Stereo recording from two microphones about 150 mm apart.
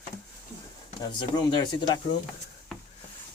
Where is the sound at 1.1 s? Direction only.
30° left (ahead or behind).